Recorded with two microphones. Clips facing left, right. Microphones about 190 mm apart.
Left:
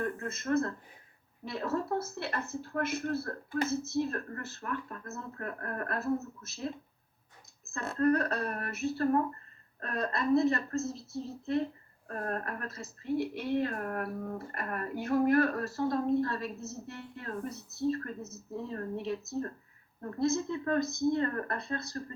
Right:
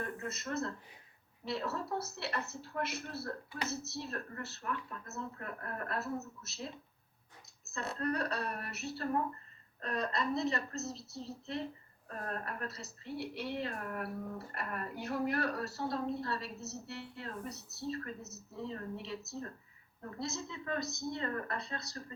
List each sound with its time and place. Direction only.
0.3 s a woman's voice: 50° left (ahead or behind)
7.6 s a woman's voice: 50° left (ahead or behind)